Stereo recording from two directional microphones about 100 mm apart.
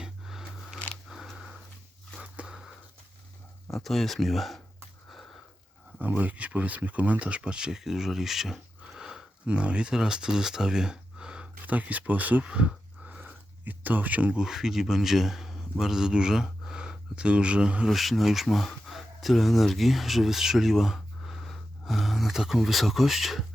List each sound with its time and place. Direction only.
0.0 s a sound: 5° right (ahead or behind)
3.7 s speech: centre (ahead or behind)
5.1 s sniff: centre (ahead or behind)
6.0 s speech: 20° right (ahead or behind); by 23.5 s centre (ahead or behind)